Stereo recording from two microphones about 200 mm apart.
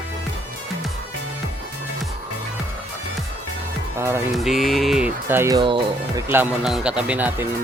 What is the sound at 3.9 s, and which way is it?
Speech, 15° right (ahead or behind).